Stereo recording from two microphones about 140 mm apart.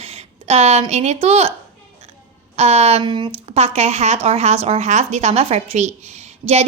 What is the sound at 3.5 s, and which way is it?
A woman's voice, 50° right (ahead or behind).